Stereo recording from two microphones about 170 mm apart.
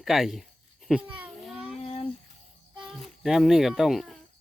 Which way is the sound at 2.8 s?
Centre (ahead or behind).